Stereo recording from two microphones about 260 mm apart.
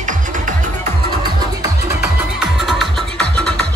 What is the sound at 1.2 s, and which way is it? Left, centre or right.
Music, centre.